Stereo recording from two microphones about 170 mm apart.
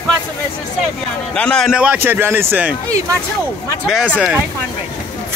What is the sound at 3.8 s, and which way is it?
Speech, 5° right (ahead or behind).